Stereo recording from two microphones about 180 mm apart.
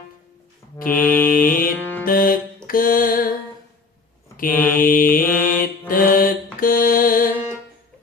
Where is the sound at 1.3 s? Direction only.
50° left (ahead or behind).